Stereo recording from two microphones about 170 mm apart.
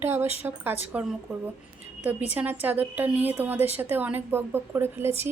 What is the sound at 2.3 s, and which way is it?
A woman's voice, 10° right (ahead or behind).